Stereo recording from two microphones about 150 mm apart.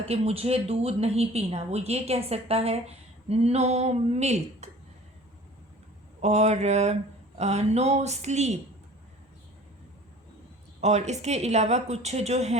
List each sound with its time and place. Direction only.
0.0 s a woman's voice: 40° right (ahead or behind)
6.2 s a woman's voice: 50° right (ahead or behind)
10.8 s a woman's voice: 50° right (ahead or behind)